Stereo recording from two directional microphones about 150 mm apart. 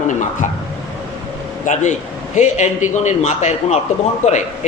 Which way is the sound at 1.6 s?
55° left (ahead or behind).